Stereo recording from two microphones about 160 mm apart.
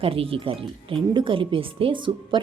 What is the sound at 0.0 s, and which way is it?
Speech, 35° right (ahead or behind).